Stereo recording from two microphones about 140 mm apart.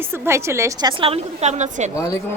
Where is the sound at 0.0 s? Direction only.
15° right (ahead or behind).